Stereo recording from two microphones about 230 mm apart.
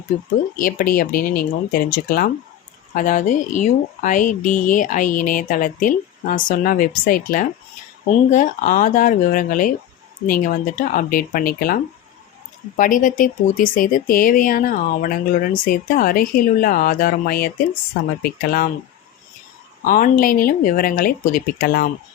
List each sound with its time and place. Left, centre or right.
0.5 s speech: left
19.8 s speech: left